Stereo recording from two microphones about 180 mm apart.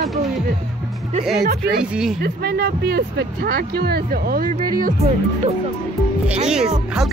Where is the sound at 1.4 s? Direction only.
60° right (ahead or behind).